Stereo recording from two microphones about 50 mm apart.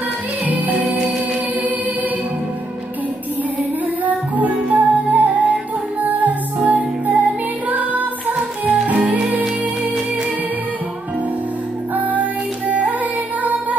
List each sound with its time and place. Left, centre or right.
0.5 s music: right
4.0 s music: right
8.3 s music: right
11.9 s music: right